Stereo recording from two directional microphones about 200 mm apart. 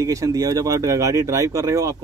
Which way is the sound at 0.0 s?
15° right (ahead or behind).